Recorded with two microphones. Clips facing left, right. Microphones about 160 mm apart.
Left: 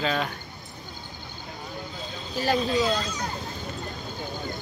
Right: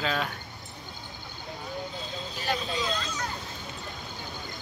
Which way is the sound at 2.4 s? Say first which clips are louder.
Left 8 dB; 35° left (ahead or behind).